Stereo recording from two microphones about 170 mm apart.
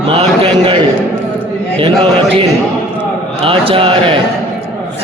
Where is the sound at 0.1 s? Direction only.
30° right (ahead or behind).